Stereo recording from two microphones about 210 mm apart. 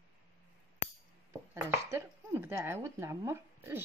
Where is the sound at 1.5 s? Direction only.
15° right (ahead or behind).